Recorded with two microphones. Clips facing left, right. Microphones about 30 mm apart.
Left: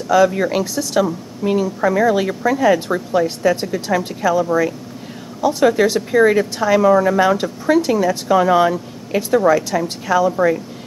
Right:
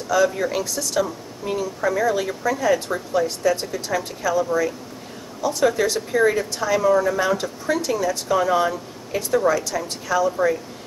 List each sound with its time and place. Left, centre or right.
0.4 s a woman's voice: left